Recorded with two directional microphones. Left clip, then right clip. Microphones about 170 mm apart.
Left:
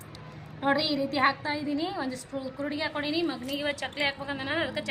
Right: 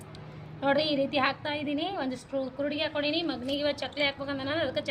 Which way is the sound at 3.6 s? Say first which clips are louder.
Even; 70° right (ahead or behind).